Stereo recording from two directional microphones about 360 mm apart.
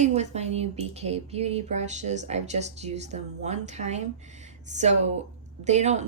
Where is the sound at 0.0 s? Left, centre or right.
Centre.